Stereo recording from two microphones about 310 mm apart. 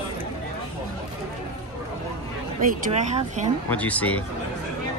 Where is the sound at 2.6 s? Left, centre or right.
Right.